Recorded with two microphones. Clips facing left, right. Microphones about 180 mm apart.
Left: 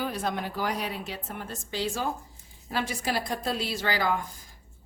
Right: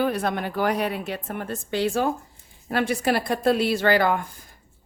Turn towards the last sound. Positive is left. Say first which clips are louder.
# right 8 dB
turn(degrees=-60)  # may be behind; listen again after turning